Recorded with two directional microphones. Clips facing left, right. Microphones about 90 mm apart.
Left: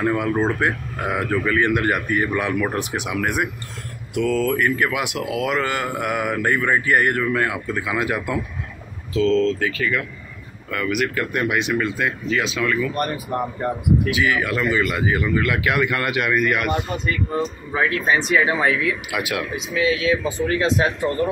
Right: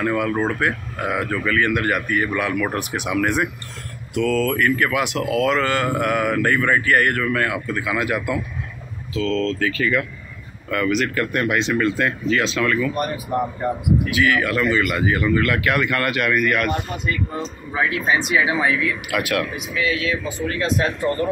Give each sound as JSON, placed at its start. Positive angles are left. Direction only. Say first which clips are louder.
{"t": 0.0, "sound": "speech", "louder": "left 1 dB", "side_deg": 20}
{"t": 9.7, "sound": "speech", "louder": "right 2 dB", "side_deg": 5}
{"t": 14.1, "sound": "speech", "louder": "right 2 dB", "side_deg": 20}
{"t": 17.7, "sound": "speech", "louder": "left 1 dB", "side_deg": -10}
{"t": 19.0, "sound": "speech", "louder": "right 3 dB", "side_deg": 15}